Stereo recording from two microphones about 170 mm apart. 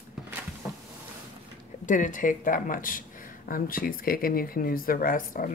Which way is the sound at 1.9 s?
50° left (ahead or behind).